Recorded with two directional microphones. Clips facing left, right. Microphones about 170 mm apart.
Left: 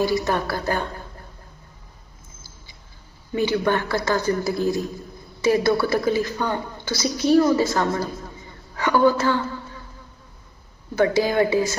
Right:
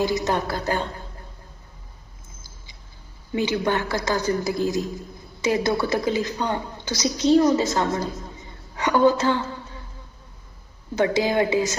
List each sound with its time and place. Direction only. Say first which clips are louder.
0.0 s a man's voice: left 1 dB; 20° right (ahead or behind)
3.3 s a man's voice: left 2 dB; 15° right (ahead or behind)
10.9 s a man's voice: left 2 dB; 20° right (ahead or behind)